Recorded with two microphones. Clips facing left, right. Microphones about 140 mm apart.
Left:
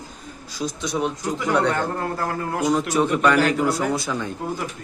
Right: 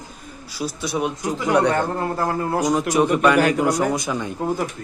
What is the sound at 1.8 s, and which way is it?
Speech, 20° right (ahead or behind).